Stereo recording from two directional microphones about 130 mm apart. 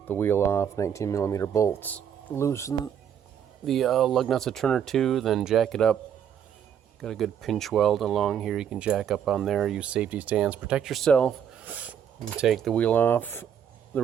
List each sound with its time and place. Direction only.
0.1 s speech: 15° left (ahead or behind)
3.7 s speech: centre (ahead or behind)
7.0 s speech: centre (ahead or behind)
11.6 s a sound: 10° right (ahead or behind)
12.4 s speech: centre (ahead or behind)